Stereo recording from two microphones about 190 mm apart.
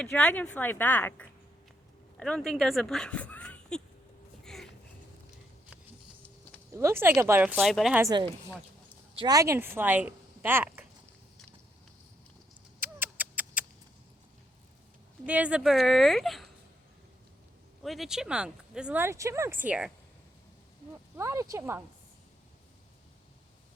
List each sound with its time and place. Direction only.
0.0 s speech: 5° left (ahead or behind)
4.4 s a sound: 5° left (ahead or behind)
6.7 s speech: 15° right (ahead or behind)
8.0 s speech: 25° right (ahead or behind)
12.8 s cat: 10° right (ahead or behind)
15.3 s speech: 5° right (ahead or behind)
17.8 s speech: centre (ahead or behind)
21.2 s speech: 15° right (ahead or behind)